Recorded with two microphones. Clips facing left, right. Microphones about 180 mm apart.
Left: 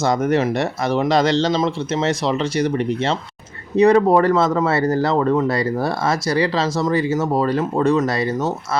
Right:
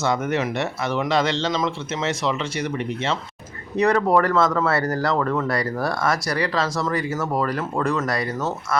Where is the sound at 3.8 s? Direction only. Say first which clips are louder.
Left 5 dB; 20° left (ahead or behind).